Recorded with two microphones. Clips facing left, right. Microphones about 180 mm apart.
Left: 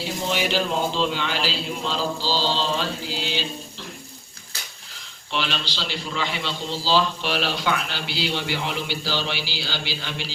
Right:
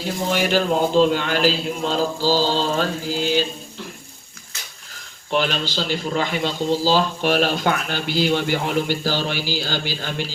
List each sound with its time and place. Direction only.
0.0 s a man's voice: 45° right (ahead or behind)
5.3 s a man's voice: 45° right (ahead or behind)